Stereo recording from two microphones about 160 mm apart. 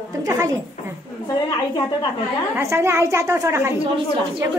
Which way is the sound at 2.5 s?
15° right (ahead or behind).